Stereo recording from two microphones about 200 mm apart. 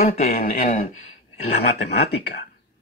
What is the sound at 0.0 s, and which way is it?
Speech, 35° left (ahead or behind).